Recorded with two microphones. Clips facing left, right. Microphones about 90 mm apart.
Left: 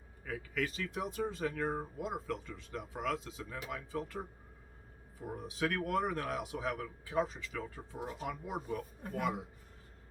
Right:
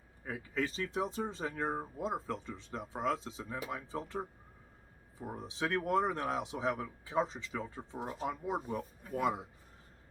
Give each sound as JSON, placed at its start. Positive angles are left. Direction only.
{"t": 0.3, "sound": "speech", "side_deg": -30}